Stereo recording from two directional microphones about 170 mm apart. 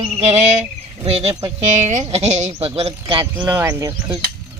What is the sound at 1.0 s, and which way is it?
Speech, 35° right (ahead or behind).